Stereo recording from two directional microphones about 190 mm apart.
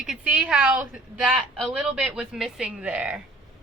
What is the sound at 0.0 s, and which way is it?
A woman's voice, 5° right (ahead or behind).